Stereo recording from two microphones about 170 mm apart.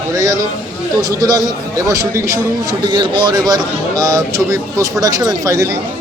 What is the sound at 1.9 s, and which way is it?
A man's voice, 20° right (ahead or behind).